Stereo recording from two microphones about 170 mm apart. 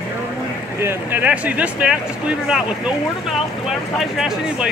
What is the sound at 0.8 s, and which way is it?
Speech, 10° right (ahead or behind).